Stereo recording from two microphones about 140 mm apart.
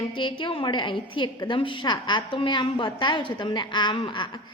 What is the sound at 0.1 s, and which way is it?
A woman's voice, 35° left (ahead or behind).